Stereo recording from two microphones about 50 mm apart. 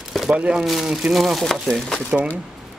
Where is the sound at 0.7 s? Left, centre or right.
Centre.